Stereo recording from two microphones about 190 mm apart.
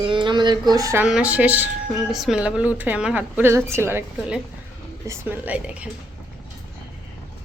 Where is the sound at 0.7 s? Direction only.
15° right (ahead or behind).